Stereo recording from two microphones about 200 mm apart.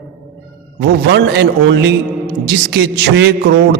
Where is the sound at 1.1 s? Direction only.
55° right (ahead or behind).